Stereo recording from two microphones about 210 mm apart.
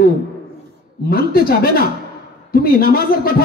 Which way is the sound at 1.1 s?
45° left (ahead or behind).